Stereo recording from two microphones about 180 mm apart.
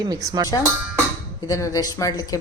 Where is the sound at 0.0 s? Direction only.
20° right (ahead or behind).